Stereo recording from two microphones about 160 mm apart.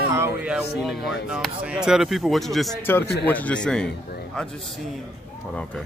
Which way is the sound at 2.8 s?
15° left (ahead or behind).